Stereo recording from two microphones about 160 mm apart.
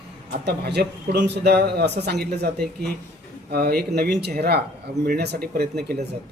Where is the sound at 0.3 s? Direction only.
90° right.